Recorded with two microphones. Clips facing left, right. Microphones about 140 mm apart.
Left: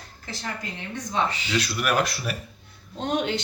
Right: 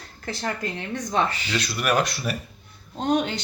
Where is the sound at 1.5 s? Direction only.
5° left (ahead or behind).